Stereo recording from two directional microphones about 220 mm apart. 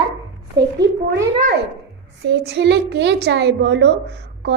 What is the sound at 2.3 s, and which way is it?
A woman's voice, 50° right (ahead or behind).